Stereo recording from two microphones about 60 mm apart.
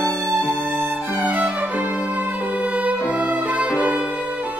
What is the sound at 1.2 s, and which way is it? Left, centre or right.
Music, right.